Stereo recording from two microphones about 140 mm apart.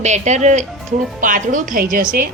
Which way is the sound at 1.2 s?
70° right (ahead or behind).